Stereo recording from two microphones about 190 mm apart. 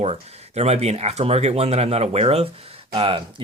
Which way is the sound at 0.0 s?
35° right (ahead or behind).